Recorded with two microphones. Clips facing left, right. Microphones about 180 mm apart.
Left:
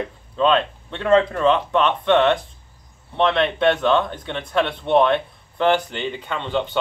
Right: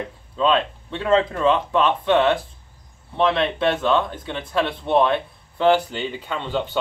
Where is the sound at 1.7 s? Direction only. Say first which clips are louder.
Left 1 dB; 5° right (ahead or behind).